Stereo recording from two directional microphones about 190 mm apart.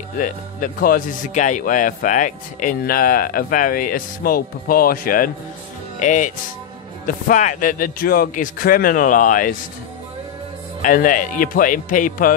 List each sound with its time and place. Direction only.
0.2 s a man's voice: 45° left (ahead or behind)
10.8 s a man's voice: 45° left (ahead or behind)